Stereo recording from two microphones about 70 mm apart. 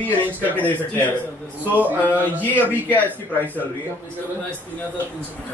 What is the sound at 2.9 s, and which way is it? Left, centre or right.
Speech, left.